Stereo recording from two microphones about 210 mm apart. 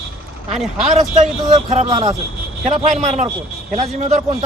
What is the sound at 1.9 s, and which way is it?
Speech, 20° right (ahead or behind).